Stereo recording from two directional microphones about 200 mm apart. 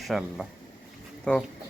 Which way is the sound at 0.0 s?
Centre (ahead or behind).